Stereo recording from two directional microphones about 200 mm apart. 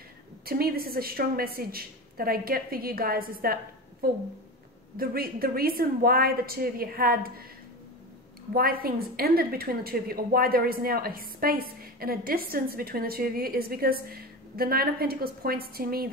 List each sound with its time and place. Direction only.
0.5 s a woman's voice: 50° right (ahead or behind)
4.9 s a woman's voice: 50° right (ahead or behind)
8.5 s a woman's voice: 50° right (ahead or behind)